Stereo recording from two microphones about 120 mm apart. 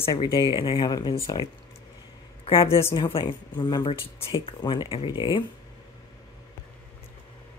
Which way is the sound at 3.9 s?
50° left (ahead or behind).